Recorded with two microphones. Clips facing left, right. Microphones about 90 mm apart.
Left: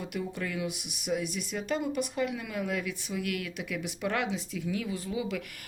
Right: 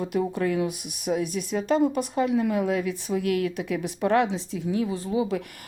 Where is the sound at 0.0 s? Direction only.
40° right (ahead or behind).